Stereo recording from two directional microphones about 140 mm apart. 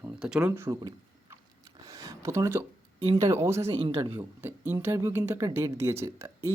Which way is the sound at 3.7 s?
40° right (ahead or behind).